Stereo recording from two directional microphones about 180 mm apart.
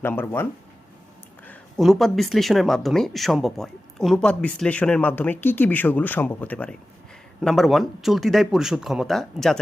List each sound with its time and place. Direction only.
0.0 s speech: 10° left (ahead or behind)
1.5 s speech: centre (ahead or behind)